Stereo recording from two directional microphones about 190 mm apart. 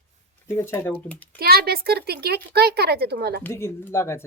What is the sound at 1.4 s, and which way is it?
Speech, 55° right (ahead or behind).